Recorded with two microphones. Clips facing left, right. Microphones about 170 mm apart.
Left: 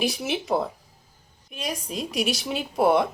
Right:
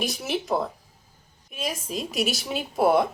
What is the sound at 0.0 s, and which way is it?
A woman's voice, centre (ahead or behind).